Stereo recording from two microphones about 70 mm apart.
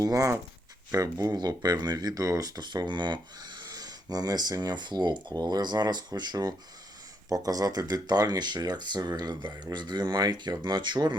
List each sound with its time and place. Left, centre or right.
0.0 s speech: right
2.6 s speech: right
7.3 s speech: right